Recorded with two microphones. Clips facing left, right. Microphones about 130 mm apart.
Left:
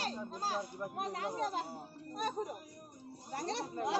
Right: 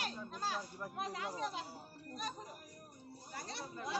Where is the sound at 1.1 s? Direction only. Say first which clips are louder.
Left 7 dB; 45° left (ahead or behind).